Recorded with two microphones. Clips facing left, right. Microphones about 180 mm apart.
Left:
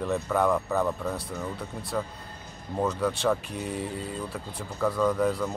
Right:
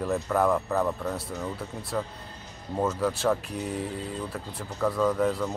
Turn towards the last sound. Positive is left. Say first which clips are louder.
# even
turn(degrees=0)  # may be behind; listen again after turning